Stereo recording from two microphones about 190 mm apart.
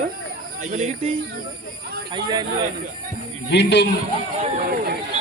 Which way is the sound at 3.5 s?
65° left (ahead or behind).